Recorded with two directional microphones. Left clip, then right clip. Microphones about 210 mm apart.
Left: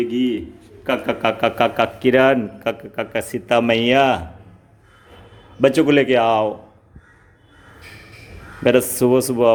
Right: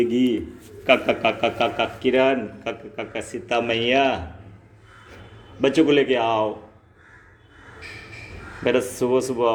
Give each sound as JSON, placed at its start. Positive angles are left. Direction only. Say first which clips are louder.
{"t": 0.0, "sound": "a man's voice", "louder": "even", "side_deg": 10}
{"t": 0.9, "sound": "a man's voice", "louder": "right 1 dB", "side_deg": 30}
{"t": 5.5, "sound": "a man's voice", "louder": "left 3 dB", "side_deg": 35}
{"t": 8.6, "sound": "a man's voice", "louder": "left 6 dB", "side_deg": 40}